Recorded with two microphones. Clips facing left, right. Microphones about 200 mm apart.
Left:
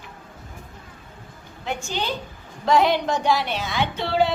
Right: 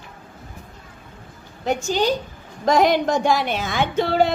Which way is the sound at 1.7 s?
40° right (ahead or behind).